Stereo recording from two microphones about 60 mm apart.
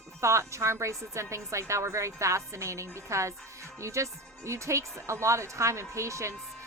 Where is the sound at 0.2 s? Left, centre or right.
Right.